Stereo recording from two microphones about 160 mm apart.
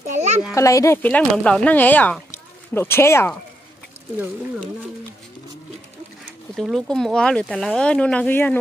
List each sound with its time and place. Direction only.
0.0 s a sound: 50° right (ahead or behind)
0.6 s speech: 20° left (ahead or behind)
6.5 s speech: centre (ahead or behind)